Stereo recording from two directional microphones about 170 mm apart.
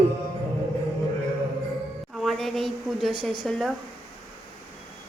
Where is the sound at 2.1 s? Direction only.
Centre (ahead or behind).